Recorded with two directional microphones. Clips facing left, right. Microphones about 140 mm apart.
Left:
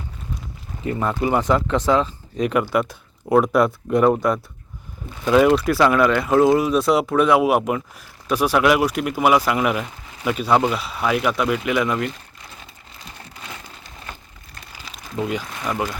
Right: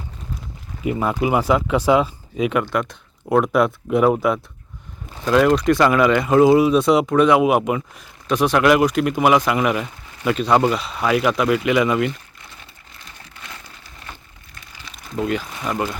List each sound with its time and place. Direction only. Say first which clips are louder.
0.9 s speech: right 1 dB; 10° right (ahead or behind)
2.5 s speech: left 4 dB; 5° left (ahead or behind)
13.0 s crumpling: left 3 dB; 35° left (ahead or behind)
15.7 s speech: right 1 dB; 10° left (ahead or behind)